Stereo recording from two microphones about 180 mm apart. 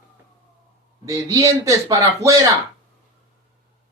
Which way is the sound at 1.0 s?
20° right (ahead or behind).